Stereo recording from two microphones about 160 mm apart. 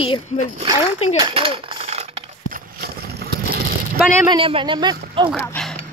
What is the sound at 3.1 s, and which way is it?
Vehicle, 75° right (ahead or behind).